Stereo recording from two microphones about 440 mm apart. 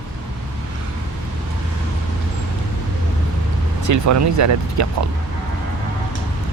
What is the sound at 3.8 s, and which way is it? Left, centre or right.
Speech, right.